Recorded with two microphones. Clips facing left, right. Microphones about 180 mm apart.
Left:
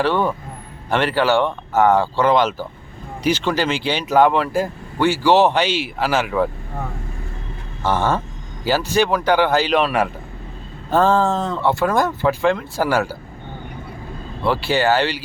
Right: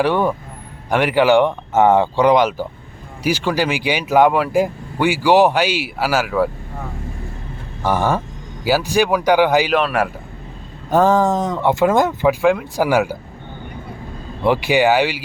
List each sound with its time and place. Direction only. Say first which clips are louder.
0.0 s speech: right 2 dB; 15° right (ahead or behind)
7.8 s vehicle: right 1 dB; 10° right (ahead or behind)
8.6 s speech: right 1 dB; 10° right (ahead or behind)
9.7 s a man's voice: even; centre (ahead or behind)
10.8 s speech: right 2 dB; 15° right (ahead or behind)
14.4 s speech: right 3 dB; 15° right (ahead or behind)